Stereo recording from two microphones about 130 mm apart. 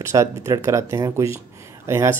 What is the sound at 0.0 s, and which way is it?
Speech, 25° right (ahead or behind).